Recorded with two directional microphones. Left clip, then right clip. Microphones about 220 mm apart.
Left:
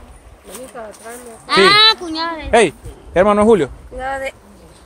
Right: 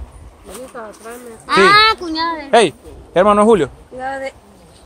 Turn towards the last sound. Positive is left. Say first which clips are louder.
# left 1 dB
turn(degrees=40)  # may be behind; listen again after turning